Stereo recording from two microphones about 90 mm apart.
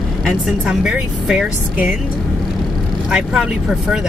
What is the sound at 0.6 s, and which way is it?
Speech, 10° right (ahead or behind).